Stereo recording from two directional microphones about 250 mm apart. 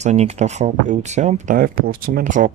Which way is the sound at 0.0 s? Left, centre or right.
Right.